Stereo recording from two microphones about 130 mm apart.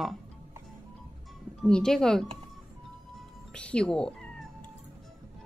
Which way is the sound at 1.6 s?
5° left (ahead or behind).